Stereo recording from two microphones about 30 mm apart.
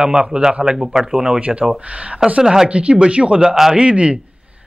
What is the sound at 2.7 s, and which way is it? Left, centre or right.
Speech, right.